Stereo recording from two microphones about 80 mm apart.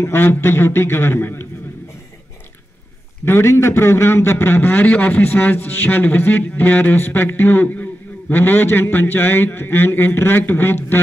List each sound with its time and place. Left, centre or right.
0.0 s a man's voice: left
3.3 s a man's voice: left